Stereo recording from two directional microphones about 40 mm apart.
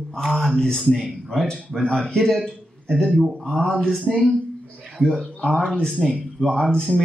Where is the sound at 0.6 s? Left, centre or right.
Centre.